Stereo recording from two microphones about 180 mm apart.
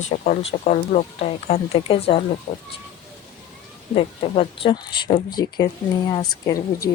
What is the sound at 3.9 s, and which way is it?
Speech, 30° left (ahead or behind).